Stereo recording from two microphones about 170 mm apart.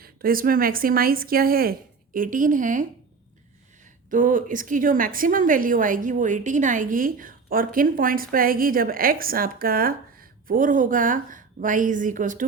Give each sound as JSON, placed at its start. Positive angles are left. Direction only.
{"t": 0.0, "sound": "a woman's voice", "side_deg": -60}
{"t": 4.1, "sound": "a woman's voice", "side_deg": -50}